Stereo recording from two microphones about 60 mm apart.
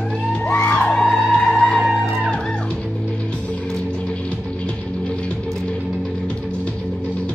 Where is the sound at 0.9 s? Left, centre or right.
Centre.